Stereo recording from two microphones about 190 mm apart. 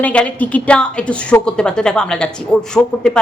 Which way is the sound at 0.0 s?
5° left (ahead or behind).